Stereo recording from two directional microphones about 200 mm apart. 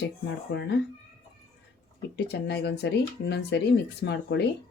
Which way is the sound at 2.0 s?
55° left (ahead or behind).